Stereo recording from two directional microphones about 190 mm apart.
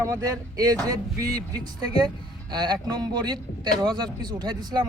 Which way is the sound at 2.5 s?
20° right (ahead or behind).